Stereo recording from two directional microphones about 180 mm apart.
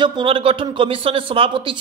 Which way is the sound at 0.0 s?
25° right (ahead or behind).